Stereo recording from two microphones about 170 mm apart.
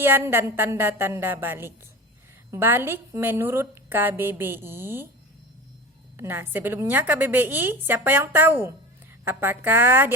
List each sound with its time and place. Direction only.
0.0 s a woman's voice: 15° right (ahead or behind)
6.1 s a woman's voice: 15° right (ahead or behind)